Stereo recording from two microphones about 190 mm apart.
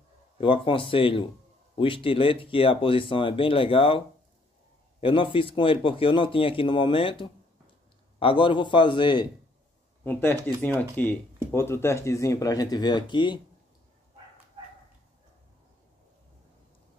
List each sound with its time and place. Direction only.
0.4 s speech: 25° left (ahead or behind)
5.0 s speech: 25° left (ahead or behind)
10.0 s speech: 10° left (ahead or behind)